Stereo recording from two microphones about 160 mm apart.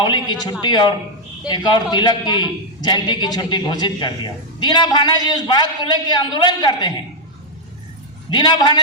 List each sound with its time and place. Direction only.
0.0 s a man's voice: 25° left (ahead or behind)
8.3 s a man's voice: 30° left (ahead or behind)